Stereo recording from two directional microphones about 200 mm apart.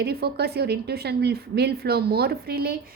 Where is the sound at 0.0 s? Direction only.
55° right (ahead or behind).